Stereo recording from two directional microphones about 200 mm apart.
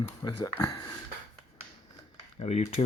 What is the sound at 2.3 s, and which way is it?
Speech, 30° left (ahead or behind).